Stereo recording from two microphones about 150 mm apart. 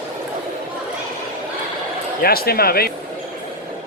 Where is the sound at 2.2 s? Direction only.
90° left.